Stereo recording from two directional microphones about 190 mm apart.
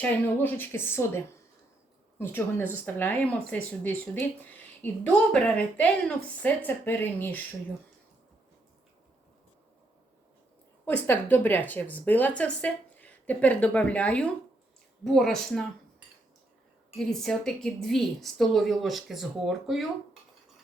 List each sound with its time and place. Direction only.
0.0 s speech: 10° left (ahead or behind)
2.2 s speech: 10° left (ahead or behind)
10.8 s a woman's voice: 10° left (ahead or behind)
17.0 s a woman's voice: 5° left (ahead or behind)